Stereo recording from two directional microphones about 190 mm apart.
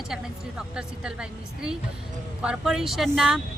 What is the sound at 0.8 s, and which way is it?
Speech, 5° right (ahead or behind).